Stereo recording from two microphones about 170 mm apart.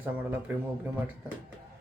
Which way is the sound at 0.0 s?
10° right (ahead or behind).